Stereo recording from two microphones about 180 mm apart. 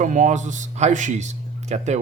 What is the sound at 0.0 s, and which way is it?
A man's voice, 45° right (ahead or behind).